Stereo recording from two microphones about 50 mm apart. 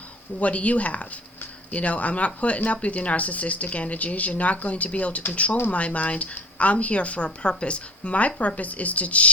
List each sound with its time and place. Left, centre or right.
0.3 s a woman's voice: left